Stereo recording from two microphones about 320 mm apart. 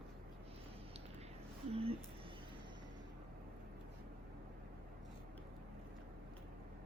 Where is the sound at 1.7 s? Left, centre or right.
Centre.